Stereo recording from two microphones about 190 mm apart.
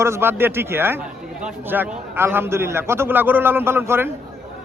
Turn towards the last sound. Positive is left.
turn(degrees=-10)  # may be behind; listen again after turning